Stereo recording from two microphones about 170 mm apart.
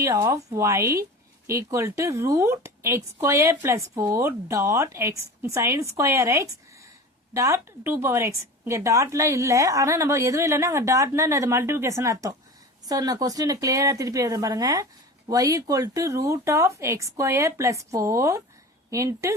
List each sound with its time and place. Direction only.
0.0 s speech: 20° right (ahead or behind)